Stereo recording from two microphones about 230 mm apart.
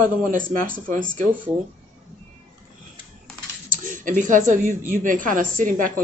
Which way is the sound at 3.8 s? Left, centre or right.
Right.